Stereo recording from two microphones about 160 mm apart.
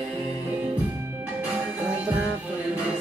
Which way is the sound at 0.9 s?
15° right (ahead or behind).